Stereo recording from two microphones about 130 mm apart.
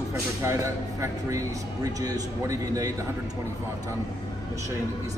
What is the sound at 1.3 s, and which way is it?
A man's voice, 30° right (ahead or behind).